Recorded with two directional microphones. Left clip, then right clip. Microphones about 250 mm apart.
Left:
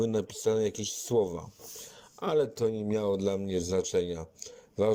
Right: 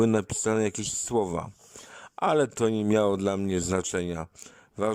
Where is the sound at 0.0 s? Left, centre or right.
Right.